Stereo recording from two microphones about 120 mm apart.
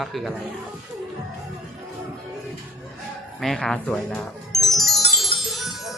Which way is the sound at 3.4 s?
5° left (ahead or behind).